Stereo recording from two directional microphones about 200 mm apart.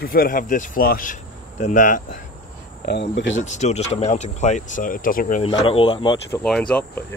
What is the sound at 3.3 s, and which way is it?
Speech, 35° left (ahead or behind).